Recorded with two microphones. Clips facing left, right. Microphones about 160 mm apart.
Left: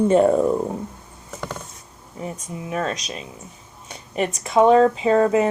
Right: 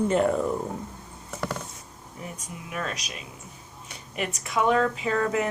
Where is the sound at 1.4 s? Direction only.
Centre (ahead or behind).